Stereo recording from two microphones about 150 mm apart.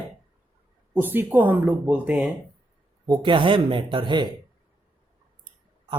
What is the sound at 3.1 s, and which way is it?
Speech, 35° right (ahead or behind).